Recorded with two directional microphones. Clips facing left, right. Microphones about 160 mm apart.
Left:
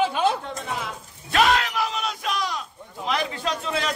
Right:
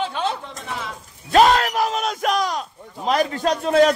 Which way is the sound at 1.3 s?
40° right (ahead or behind).